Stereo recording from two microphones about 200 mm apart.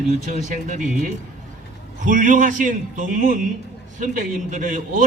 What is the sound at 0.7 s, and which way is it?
Speech, 40° right (ahead or behind).